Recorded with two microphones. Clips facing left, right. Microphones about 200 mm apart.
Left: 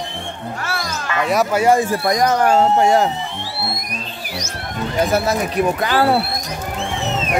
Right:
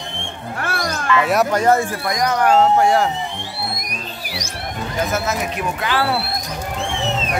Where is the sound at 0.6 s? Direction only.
55° right (ahead or behind).